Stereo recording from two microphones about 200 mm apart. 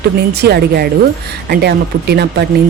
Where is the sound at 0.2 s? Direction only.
55° right (ahead or behind).